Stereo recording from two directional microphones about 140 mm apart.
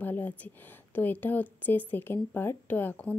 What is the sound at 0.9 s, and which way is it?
Speech, 10° left (ahead or behind).